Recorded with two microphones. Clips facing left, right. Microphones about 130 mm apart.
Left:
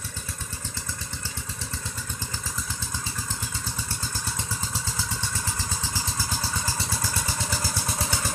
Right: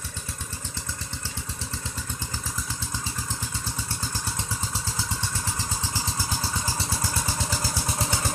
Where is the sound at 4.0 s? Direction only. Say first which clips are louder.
Right 1 dB; 15° right (ahead or behind).